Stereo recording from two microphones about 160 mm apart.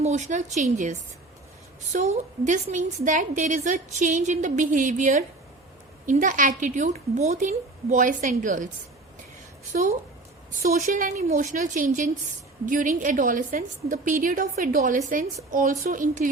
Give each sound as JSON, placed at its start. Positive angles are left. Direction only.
{"t": 0.0, "sound": "a woman's voice", "side_deg": -45}
{"t": 10.6, "sound": "a woman's voice", "side_deg": -60}